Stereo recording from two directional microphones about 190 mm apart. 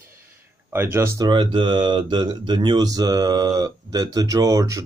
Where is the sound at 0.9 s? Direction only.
15° right (ahead or behind).